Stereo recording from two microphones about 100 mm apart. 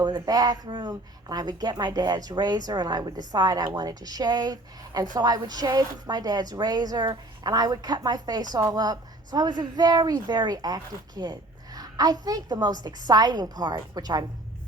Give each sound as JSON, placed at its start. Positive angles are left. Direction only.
{"t": 0.0, "sound": "speech", "side_deg": -40}